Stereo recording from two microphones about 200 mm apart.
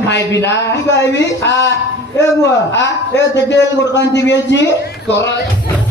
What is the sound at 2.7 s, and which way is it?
A man's voice, 60° left (ahead or behind).